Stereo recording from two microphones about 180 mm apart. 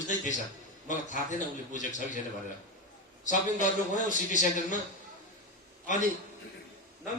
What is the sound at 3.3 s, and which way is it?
A man's voice, 45° left (ahead or behind).